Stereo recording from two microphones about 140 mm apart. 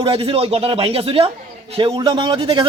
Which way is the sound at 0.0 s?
40° right (ahead or behind).